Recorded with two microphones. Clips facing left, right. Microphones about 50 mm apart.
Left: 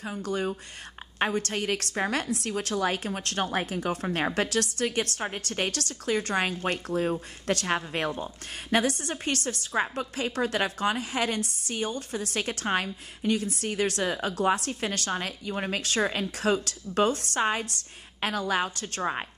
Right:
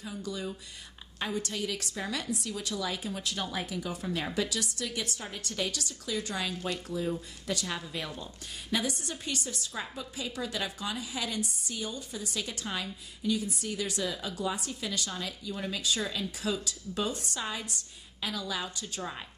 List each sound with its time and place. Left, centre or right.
0.0 s a woman's voice: left
8.8 s a woman's voice: left